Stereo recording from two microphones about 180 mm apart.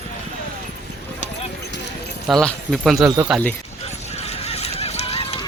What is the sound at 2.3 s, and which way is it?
Speech, centre (ahead or behind).